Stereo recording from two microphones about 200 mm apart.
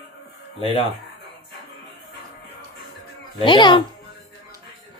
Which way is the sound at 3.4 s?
25° left (ahead or behind).